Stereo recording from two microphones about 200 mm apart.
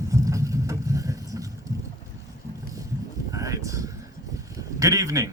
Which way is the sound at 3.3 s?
15° right (ahead or behind).